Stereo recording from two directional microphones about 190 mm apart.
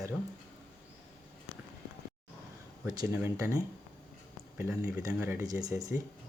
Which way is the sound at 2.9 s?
20° right (ahead or behind).